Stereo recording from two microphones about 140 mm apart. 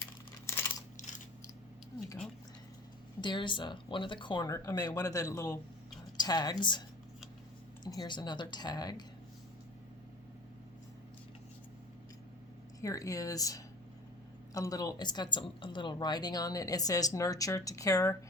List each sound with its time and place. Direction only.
0.4 s a sound: 20° left (ahead or behind)
3.2 s a woman's voice: 35° left (ahead or behind)
7.9 s speech: 30° left (ahead or behind)
12.8 s a woman's voice: 25° left (ahead or behind)